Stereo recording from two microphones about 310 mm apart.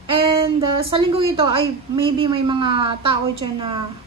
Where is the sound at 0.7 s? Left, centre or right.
Centre.